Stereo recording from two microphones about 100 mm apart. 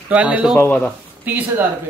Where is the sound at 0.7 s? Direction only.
15° left (ahead or behind).